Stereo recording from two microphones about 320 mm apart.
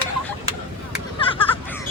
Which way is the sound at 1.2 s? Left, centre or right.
Centre.